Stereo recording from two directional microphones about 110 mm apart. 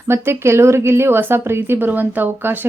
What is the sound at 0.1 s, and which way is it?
Speech, 25° right (ahead or behind).